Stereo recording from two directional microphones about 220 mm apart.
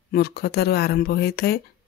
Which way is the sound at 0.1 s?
45° left (ahead or behind).